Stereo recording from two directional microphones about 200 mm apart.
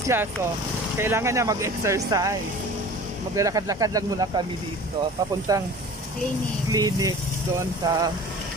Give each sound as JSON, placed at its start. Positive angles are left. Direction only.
{"t": 0.9, "sound": "speech", "side_deg": -15}
{"t": 3.3, "sound": "speech", "side_deg": -15}
{"t": 6.7, "sound": "speech", "side_deg": -20}